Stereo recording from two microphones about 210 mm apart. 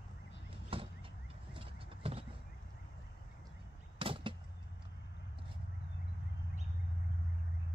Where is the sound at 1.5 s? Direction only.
25° right (ahead or behind).